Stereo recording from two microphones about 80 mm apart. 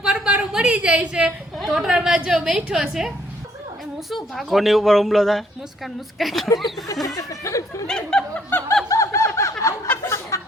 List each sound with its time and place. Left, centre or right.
0.0 s a woman's voice: centre
1.5 s a woman's voice: centre
4.1 s a woman's voice: centre
7.2 s speech: left
7.9 s speech: centre
8.5 s snicker: left
8.9 s snicker: left
9.9 s a sound: left